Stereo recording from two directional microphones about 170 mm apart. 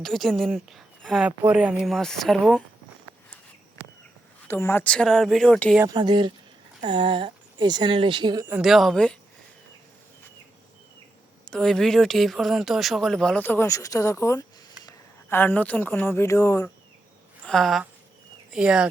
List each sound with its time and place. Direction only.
0.0 s speech: centre (ahead or behind)
4.4 s speech: 15° left (ahead or behind)
5.8 s speech: 25° right (ahead or behind)
8.4 s speech: 5° right (ahead or behind)
11.4 s speech: 5° left (ahead or behind)
17.4 s speech: centre (ahead or behind)